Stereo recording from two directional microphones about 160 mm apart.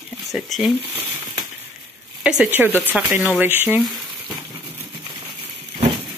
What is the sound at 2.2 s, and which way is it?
Speech, 5° right (ahead or behind).